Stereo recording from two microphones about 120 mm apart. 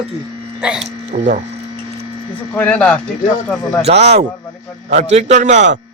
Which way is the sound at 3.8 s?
60° right (ahead or behind).